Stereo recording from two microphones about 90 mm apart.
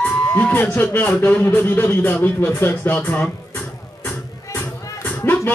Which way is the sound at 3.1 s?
20° left (ahead or behind).